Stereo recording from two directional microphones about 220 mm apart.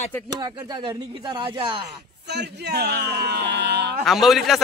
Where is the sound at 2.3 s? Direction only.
50° right (ahead or behind).